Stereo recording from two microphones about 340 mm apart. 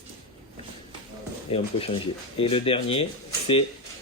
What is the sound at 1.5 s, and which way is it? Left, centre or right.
Speech, centre.